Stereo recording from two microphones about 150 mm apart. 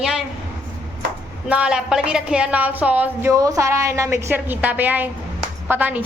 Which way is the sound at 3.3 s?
20° right (ahead or behind).